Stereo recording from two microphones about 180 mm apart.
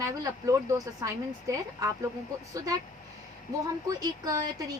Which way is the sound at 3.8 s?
20° right (ahead or behind).